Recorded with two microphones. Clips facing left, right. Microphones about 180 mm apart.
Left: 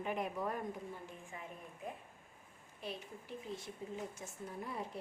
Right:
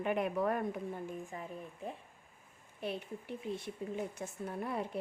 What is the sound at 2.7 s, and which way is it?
A woman's voice, 60° right (ahead or behind).